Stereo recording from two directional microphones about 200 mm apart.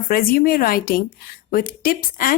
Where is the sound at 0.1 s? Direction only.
45° left (ahead or behind).